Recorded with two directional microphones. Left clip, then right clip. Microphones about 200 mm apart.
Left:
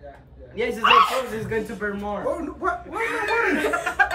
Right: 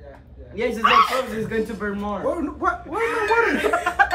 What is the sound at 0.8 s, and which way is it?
Speech, 15° left (ahead or behind).